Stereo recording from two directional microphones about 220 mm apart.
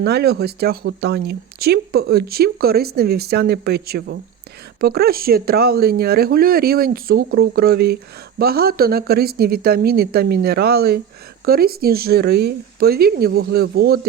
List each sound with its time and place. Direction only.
0.0 s speech: 45° right (ahead or behind)